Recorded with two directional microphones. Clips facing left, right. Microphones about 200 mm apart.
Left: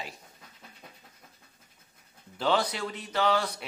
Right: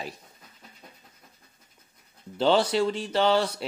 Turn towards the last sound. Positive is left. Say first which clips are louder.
# right 4 dB
turn(degrees=-30)  # may be behind; listen again after turning